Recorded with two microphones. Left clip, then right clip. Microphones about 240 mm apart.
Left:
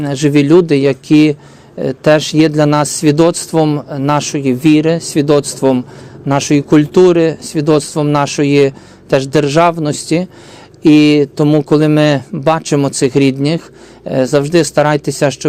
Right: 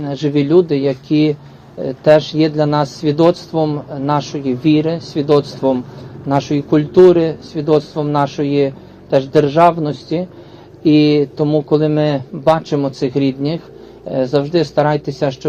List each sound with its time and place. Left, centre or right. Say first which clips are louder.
0.0 s speech: left 5 dB; left